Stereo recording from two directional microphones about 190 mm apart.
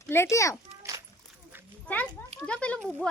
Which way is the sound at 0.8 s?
15° right (ahead or behind).